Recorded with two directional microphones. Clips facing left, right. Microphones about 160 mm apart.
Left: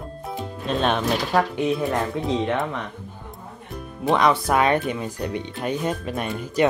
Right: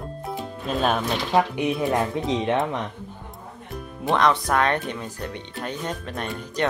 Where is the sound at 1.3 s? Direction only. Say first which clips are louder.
Right 2 dB; 15° right (ahead or behind).